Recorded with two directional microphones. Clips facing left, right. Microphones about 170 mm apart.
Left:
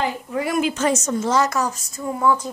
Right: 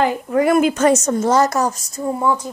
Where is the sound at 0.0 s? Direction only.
50° right (ahead or behind).